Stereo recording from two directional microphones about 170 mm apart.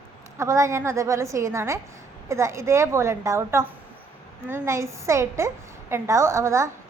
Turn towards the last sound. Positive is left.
turn(degrees=-15)  # may be behind; listen again after turning